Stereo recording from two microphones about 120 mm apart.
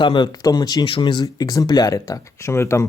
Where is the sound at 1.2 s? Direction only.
30° left (ahead or behind).